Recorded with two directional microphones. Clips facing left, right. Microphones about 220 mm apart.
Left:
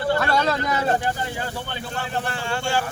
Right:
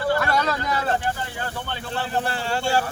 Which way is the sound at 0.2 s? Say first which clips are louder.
Left 2 dB; 30° left (ahead or behind).